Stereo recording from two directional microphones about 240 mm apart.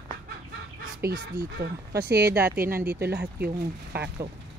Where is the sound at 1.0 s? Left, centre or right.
Right.